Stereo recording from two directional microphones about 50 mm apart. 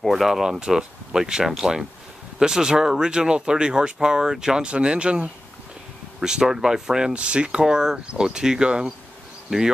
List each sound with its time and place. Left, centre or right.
0.1 s speech: centre